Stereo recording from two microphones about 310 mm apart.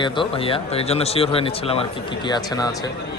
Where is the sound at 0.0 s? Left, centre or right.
Centre.